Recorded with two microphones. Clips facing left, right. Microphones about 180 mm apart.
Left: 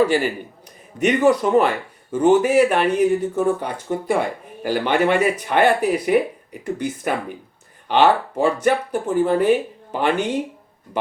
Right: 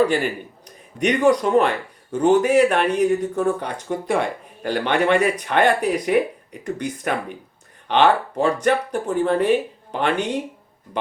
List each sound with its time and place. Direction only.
0.0 s speech: 10° left (ahead or behind)